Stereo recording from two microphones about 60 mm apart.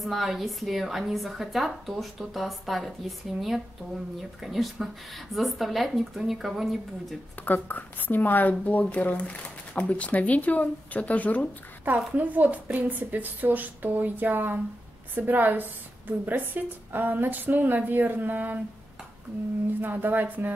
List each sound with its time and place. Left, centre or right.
0.0 s a woman's voice: centre
7.4 s speech: left
12.2 s a woman's voice: right
19.8 s a woman's voice: right